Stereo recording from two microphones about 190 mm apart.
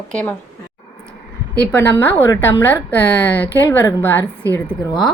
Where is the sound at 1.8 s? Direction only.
10° left (ahead or behind).